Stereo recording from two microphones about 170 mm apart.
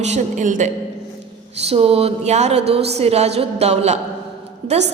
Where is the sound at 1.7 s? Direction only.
35° right (ahead or behind).